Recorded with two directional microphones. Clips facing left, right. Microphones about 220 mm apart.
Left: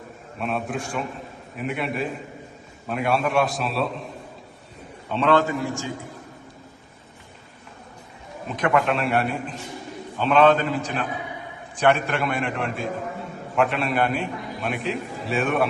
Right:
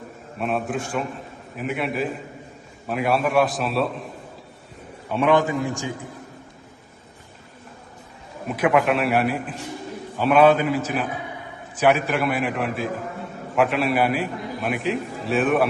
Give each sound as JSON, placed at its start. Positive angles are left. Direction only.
{"t": 0.3, "sound": "a man's voice", "side_deg": 0}
{"t": 5.0, "sound": "a man's voice", "side_deg": -10}
{"t": 8.4, "sound": "a man's voice", "side_deg": -5}